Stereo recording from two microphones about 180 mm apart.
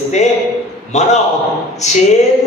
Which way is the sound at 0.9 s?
40° left (ahead or behind).